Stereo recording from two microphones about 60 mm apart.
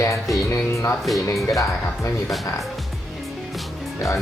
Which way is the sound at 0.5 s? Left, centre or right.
Left.